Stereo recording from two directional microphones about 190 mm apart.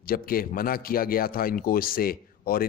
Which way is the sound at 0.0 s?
50° left (ahead or behind).